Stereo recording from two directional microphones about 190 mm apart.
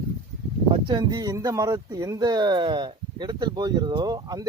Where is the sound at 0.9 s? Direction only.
20° right (ahead or behind).